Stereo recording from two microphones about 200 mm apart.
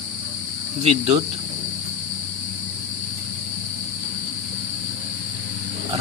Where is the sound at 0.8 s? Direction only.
30° right (ahead or behind).